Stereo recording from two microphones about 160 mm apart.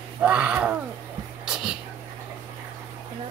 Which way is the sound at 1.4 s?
5° right (ahead or behind).